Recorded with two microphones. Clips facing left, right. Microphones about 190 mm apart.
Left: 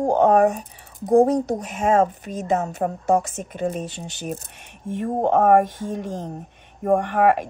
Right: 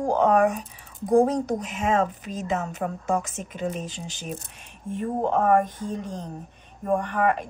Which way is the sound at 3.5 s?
60° left (ahead or behind).